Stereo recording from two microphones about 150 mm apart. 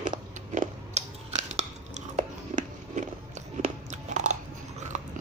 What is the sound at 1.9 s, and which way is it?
Biting, 55° right (ahead or behind).